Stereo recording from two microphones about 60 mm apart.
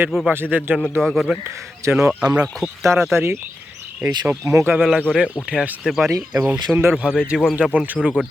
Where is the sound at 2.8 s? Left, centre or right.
Right.